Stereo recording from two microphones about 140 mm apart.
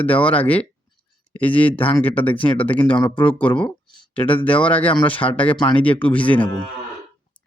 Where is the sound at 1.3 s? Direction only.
40° left (ahead or behind).